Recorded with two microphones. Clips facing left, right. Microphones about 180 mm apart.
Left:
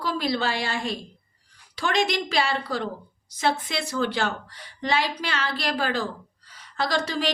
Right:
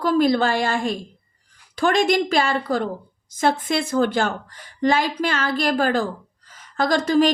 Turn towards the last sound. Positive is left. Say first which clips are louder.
# right 8 dB
turn(degrees=-50)  # may be behind; listen again after turning